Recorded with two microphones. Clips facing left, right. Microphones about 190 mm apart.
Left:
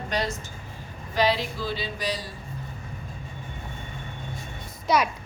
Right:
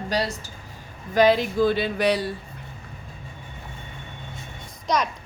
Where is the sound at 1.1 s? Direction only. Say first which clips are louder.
Right 6 dB; 50° right (ahead or behind).